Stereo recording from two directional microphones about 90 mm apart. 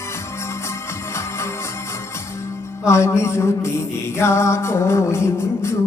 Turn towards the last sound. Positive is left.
turn(degrees=30)  # may be behind; listen again after turning